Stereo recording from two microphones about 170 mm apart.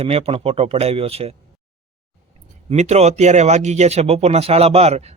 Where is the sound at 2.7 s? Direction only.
40° right (ahead or behind).